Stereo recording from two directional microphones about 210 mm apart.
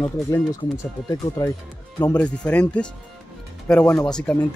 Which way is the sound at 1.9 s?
5° left (ahead or behind).